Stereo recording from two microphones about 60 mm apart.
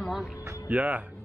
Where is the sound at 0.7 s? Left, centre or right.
Right.